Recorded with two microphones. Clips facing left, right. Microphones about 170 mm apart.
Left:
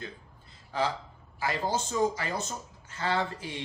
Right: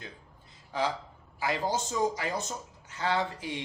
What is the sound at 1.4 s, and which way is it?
Speech, 15° right (ahead or behind).